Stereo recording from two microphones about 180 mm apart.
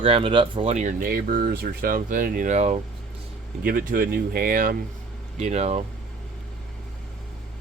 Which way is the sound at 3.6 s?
55° right (ahead or behind).